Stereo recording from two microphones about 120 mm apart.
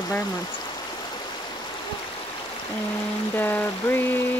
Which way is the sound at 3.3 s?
15° left (ahead or behind).